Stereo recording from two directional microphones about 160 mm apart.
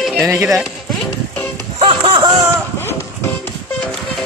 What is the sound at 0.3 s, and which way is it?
Speech, 20° right (ahead or behind).